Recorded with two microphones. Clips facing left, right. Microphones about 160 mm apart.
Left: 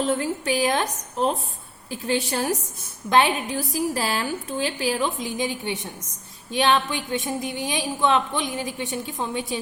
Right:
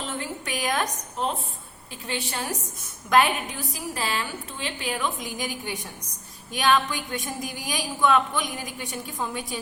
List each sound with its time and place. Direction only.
0.0 s a woman's voice: 40° left (ahead or behind)
1.9 s a woman's voice: 40° left (ahead or behind); by 9.6 s 25° left (ahead or behind)